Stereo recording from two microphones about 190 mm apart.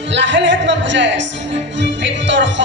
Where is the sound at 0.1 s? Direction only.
70° right (ahead or behind).